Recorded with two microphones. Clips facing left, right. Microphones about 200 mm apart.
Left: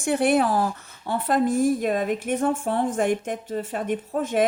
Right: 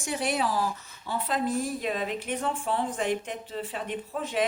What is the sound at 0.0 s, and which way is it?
A woman's voice, 55° left (ahead or behind).